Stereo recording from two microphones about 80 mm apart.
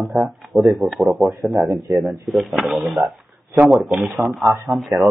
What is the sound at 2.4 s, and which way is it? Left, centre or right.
Speech, centre.